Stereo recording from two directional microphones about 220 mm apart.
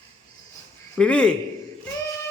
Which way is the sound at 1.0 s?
5° left (ahead or behind).